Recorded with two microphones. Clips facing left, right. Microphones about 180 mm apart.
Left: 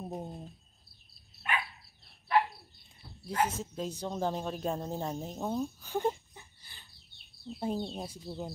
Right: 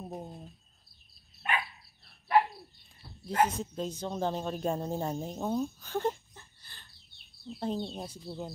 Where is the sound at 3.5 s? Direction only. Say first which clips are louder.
Right 2 dB; centre (ahead or behind).